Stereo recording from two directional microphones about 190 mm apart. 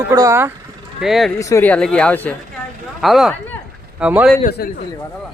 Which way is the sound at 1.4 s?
15° left (ahead or behind).